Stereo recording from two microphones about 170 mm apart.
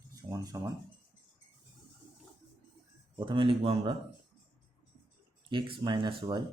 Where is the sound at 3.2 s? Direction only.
30° right (ahead or behind).